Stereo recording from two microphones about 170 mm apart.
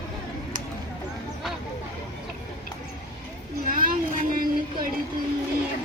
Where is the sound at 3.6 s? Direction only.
55° right (ahead or behind).